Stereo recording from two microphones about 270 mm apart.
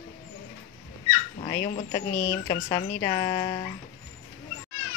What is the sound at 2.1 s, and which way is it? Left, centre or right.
Speech, left.